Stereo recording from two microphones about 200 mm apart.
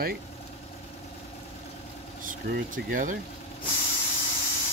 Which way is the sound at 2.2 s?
40° right (ahead or behind).